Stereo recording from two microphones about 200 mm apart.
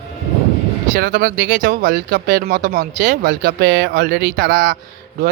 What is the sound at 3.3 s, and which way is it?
Speech, 55° right (ahead or behind).